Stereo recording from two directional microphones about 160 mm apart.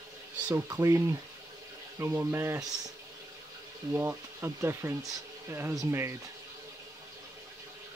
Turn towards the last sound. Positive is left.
turn(degrees=-20)  # may be behind; listen again after turning